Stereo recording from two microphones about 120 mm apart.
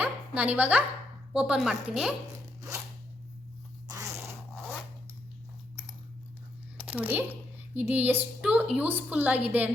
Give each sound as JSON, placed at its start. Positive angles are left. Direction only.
{"t": 0.0, "sound": "music", "side_deg": -10}
{"t": 1.3, "sound": "a woman's voice", "side_deg": -5}
{"t": 2.6, "sound": "a sound", "side_deg": -25}
{"t": 3.8, "sound": "zipper", "side_deg": -25}
{"t": 6.7, "sound": "a sound", "side_deg": -15}
{"t": 7.7, "sound": "a woman's voice", "side_deg": -15}